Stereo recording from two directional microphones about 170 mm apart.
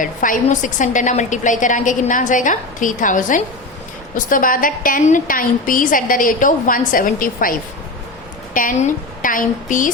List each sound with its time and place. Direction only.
0.0 s a woman's voice: 50° left (ahead or behind)